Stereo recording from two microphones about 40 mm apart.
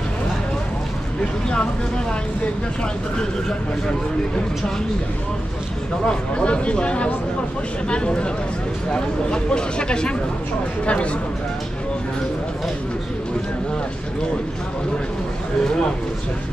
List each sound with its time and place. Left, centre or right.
3.2 s speech: centre
6.0 s speech: left